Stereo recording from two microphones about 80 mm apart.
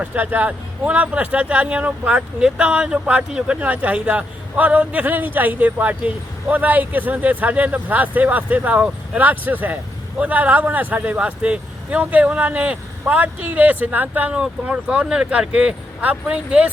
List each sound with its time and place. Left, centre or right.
0.0 s speech: centre